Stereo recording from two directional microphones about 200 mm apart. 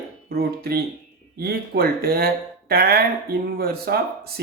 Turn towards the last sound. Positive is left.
turn(degrees=-50)  # may be behind; listen again after turning